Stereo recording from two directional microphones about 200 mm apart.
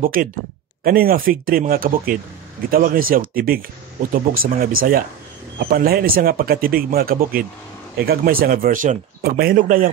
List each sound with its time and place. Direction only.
0.0 s speech: 45° right (ahead or behind)